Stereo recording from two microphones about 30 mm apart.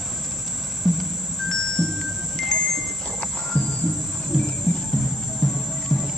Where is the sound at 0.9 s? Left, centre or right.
Centre.